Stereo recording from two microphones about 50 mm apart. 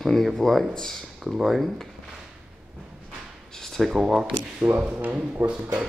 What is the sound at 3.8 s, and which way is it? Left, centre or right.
Speech, centre.